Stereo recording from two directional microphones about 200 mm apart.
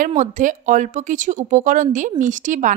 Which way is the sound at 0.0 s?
40° right (ahead or behind).